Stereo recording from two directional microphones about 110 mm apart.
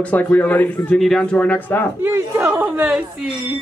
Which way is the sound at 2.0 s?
20° right (ahead or behind).